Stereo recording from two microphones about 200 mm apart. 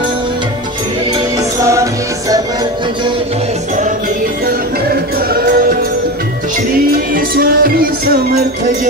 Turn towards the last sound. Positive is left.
turn(degrees=-50)  # may be behind; listen again after turning